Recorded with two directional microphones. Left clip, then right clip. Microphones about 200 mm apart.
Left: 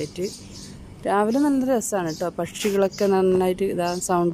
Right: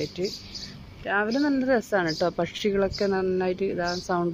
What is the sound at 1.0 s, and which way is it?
Speech, 20° left (ahead or behind).